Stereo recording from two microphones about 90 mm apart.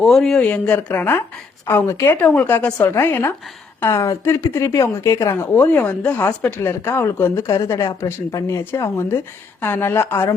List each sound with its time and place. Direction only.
0.0 s speech: 5° left (ahead or behind)
0.4 s a woman's voice: 15° left (ahead or behind)
2.1 s speech: 15° left (ahead or behind)
2.8 s a woman's voice: 25° left (ahead or behind)
5.5 s a woman's voice: 15° left (ahead or behind)
7.4 s a woman's voice: 40° left (ahead or behind)